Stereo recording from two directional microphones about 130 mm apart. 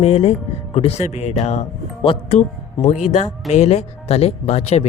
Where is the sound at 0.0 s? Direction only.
50° left (ahead or behind).